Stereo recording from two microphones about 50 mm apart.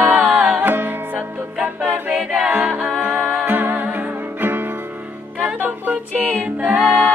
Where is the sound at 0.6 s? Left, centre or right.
Right.